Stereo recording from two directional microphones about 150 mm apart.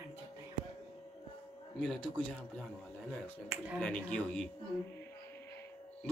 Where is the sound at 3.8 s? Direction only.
5° left (ahead or behind).